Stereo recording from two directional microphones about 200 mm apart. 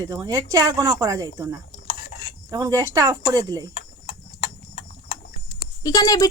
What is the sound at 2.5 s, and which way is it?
Speech, 15° right (ahead or behind).